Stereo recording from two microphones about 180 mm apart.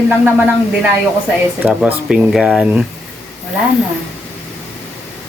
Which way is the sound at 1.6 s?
10° right (ahead or behind).